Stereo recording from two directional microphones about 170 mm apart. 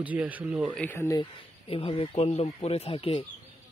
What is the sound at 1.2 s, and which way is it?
Speech, 35° left (ahead or behind).